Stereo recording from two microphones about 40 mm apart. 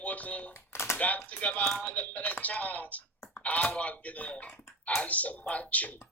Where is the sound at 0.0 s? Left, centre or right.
Left.